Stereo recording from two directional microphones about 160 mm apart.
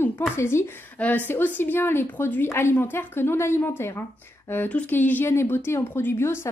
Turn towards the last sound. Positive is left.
turn(degrees=15)  # may be behind; listen again after turning